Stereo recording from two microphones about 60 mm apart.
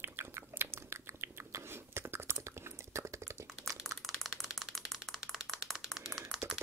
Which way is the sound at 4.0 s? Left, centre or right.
Centre.